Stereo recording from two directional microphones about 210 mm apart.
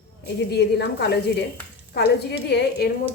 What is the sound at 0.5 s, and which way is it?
A woman's voice, 50° left (ahead or behind).